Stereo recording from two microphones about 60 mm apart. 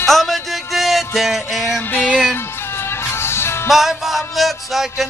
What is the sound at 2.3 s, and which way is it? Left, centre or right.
Music, left.